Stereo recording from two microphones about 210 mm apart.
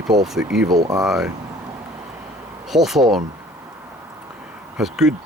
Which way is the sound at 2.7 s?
Centre (ahead or behind).